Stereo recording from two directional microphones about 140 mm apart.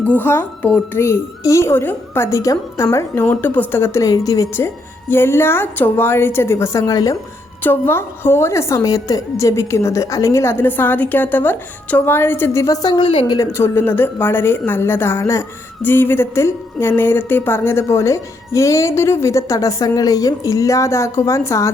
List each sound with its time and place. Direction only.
0.0 s a woman's voice: 10° left (ahead or behind); by 13.4 s 35° left (ahead or behind)
13.4 s a woman's voice: 20° left (ahead or behind)